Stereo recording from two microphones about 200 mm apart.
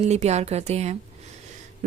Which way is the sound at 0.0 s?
35° right (ahead or behind).